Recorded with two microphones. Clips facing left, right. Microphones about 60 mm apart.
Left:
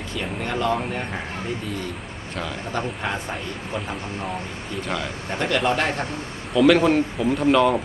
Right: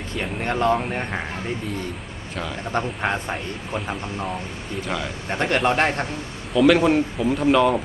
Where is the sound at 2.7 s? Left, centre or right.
Right.